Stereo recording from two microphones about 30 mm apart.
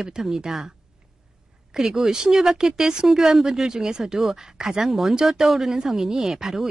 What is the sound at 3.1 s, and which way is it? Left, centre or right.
Speech, centre.